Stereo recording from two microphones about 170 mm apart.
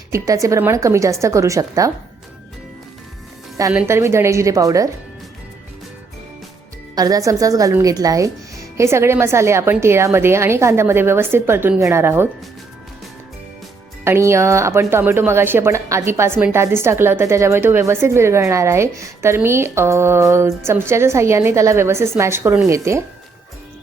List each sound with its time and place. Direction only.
0.1 s a woman's voice: 20° right (ahead or behind)
3.7 s speech: 15° right (ahead or behind)
6.9 s speech: 20° right (ahead or behind)
14.0 s speech: 15° right (ahead or behind)